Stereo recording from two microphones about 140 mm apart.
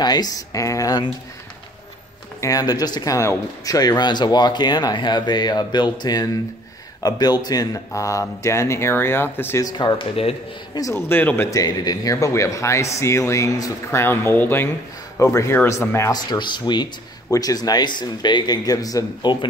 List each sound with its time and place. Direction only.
0.0 s speech: 30° left (ahead or behind)
2.4 s speech: 25° left (ahead or behind)
10.7 s speech: 25° left (ahead or behind)
11.6 s speech: 25° left (ahead or behind)
16.3 s speech: 35° left (ahead or behind)